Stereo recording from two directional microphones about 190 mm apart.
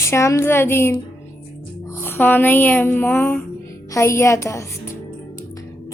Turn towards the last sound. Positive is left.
turn(degrees=15)  # may be behind; listen again after turning